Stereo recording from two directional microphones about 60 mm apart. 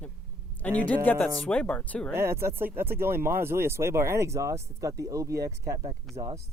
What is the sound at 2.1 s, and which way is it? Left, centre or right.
Speech, right.